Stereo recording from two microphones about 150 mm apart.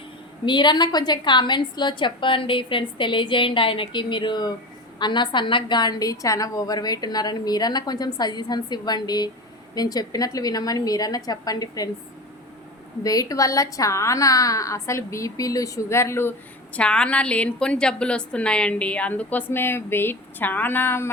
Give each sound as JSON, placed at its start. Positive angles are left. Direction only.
{"t": 0.4, "sound": "a woman's voice", "side_deg": 30}
{"t": 13.0, "sound": "a woman's voice", "side_deg": 25}